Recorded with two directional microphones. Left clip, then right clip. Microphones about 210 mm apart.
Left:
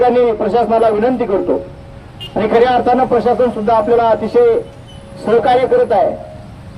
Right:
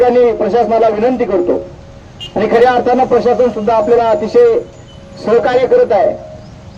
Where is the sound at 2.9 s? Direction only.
40° right (ahead or behind).